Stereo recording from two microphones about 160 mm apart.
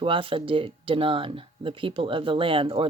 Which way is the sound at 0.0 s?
35° right (ahead or behind).